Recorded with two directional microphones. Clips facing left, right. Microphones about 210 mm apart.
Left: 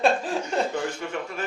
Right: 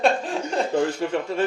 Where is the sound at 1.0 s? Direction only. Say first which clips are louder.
Right 8 dB; 30° right (ahead or behind).